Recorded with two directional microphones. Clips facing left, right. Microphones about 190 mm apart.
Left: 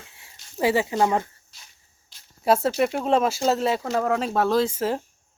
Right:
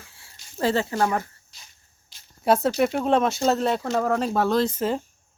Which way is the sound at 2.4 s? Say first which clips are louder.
Even; 5° left (ahead or behind).